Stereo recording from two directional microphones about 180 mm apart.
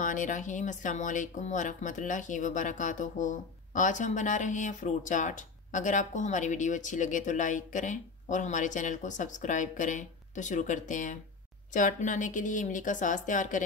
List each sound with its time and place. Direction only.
0.0 s speech: 45° left (ahead or behind)